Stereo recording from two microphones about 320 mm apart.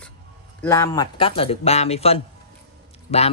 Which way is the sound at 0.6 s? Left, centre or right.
Centre.